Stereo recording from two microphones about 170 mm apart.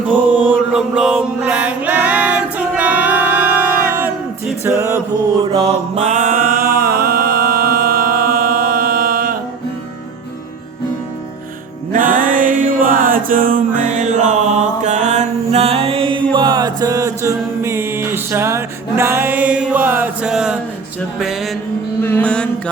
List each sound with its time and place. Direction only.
0.1 s mantra: 10° right (ahead or behind)
4.6 s music: 15° right (ahead or behind)
5.5 s mantra: 35° right (ahead or behind); by 9.4 s 60° right (ahead or behind)
11.9 s mantra: 50° right (ahead or behind); by 20.6 s 5° right (ahead or behind)
21.2 s music: centre (ahead or behind)
22.0 s mantra: 10° left (ahead or behind)